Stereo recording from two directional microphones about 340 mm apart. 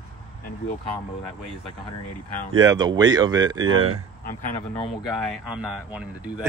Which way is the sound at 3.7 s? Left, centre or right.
Right.